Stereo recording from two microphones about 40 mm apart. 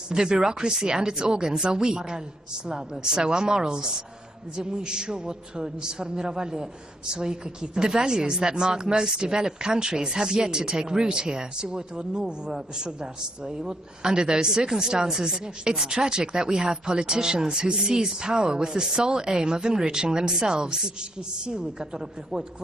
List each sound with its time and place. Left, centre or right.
0.1 s speech: centre
18.9 s speech: right